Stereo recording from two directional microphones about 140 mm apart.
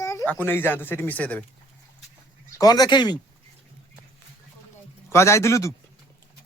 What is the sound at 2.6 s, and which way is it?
Speech, 30° left (ahead or behind).